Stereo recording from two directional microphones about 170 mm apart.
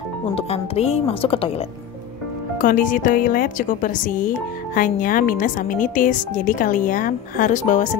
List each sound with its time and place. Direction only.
0.3 s speech: 35° left (ahead or behind)
2.6 s speech: 55° left (ahead or behind)